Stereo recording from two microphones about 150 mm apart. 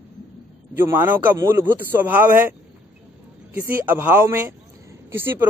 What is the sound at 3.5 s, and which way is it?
Speech, 15° right (ahead or behind).